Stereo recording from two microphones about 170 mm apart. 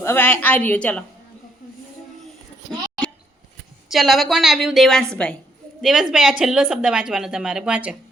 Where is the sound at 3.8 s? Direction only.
Centre (ahead or behind).